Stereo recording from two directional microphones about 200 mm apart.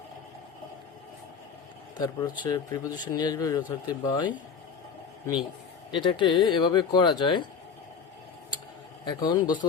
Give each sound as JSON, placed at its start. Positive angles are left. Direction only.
{"t": 2.0, "sound": "speech", "side_deg": 15}
{"t": 9.0, "sound": "speech", "side_deg": 20}